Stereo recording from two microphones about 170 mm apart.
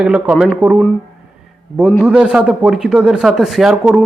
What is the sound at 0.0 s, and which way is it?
Speech, 5° right (ahead or behind).